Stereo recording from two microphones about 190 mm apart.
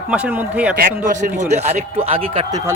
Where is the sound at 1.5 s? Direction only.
35° right (ahead or behind).